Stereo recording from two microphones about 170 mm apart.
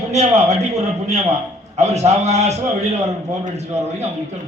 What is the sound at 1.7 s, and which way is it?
A man's voice, 40° right (ahead or behind).